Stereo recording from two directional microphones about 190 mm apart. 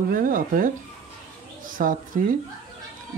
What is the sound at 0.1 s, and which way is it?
Speech, 45° right (ahead or behind).